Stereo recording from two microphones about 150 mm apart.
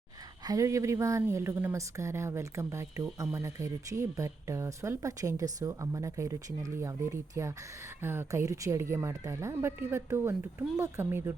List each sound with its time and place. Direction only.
0.4 s speech: 20° right (ahead or behind)